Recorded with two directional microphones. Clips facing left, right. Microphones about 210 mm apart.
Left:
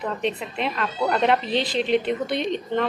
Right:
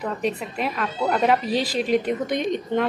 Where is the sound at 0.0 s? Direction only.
5° right (ahead or behind).